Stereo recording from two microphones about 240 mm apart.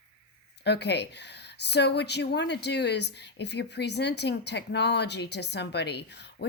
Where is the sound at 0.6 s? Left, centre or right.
Left.